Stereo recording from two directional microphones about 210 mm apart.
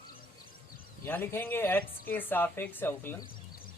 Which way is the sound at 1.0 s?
10° left (ahead or behind).